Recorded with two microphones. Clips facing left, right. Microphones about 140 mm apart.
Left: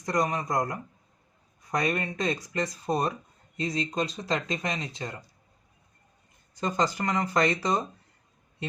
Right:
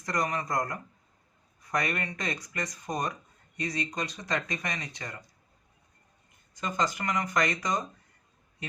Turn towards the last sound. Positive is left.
turn(degrees=30)  # may be behind; listen again after turning